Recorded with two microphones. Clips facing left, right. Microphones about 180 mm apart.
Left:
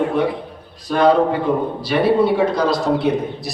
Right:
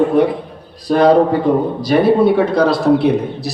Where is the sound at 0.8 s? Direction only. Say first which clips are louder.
Right 4 dB; 35° right (ahead or behind).